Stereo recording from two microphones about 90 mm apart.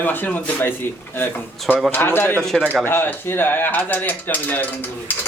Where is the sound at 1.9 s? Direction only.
25° left (ahead or behind).